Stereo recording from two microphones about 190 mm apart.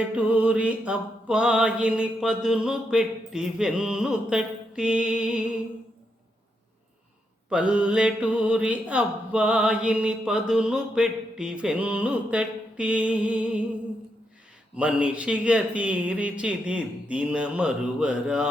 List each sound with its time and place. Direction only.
0.2 s speech: 5° right (ahead or behind)
7.5 s speech: 5° right (ahead or behind)
14.8 s a man's voice: 5° right (ahead or behind)